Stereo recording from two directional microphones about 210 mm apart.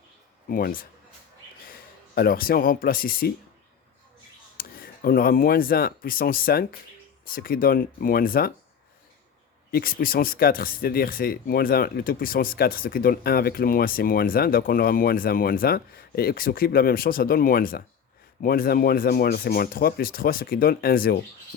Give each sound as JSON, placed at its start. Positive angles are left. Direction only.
{"t": 0.4, "sound": "speech", "side_deg": 45}
{"t": 4.5, "sound": "speech", "side_deg": 45}
{"t": 9.7, "sound": "speech", "side_deg": 45}